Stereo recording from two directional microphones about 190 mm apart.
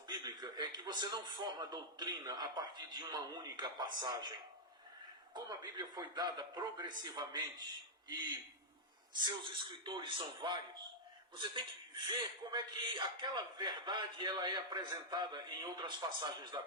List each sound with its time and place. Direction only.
0.1 s a man's voice: 20° right (ahead or behind)
9.2 s a man's voice: 25° right (ahead or behind)